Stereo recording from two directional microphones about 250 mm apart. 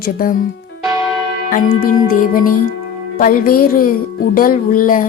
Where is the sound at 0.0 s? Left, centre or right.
Left.